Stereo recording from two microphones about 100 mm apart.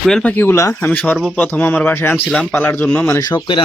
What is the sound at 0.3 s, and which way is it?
Speech, 25° left (ahead or behind).